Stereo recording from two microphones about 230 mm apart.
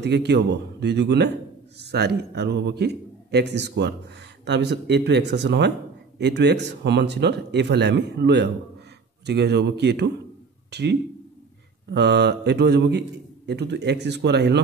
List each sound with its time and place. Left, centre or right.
0.0 s speech: right